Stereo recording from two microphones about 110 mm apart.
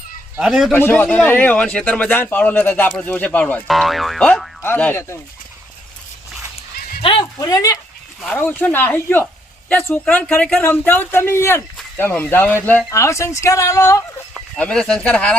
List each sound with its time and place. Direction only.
0.3 s speech: 5° right (ahead or behind)
0.7 s speech: 15° left (ahead or behind)
3.7 s speech: centre (ahead or behind)
4.6 s speech: 20° left (ahead or behind)
7.0 s a sound: 50° left (ahead or behind)
7.3 s speech: 30° left (ahead or behind)
8.3 s speech: 15° left (ahead or behind)
12.9 s speech: 25° left (ahead or behind)
14.5 s speech: 5° left (ahead or behind)